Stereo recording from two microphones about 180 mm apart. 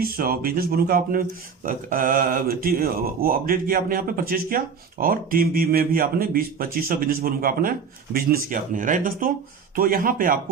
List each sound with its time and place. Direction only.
0.0 s speech: 55° right (ahead or behind)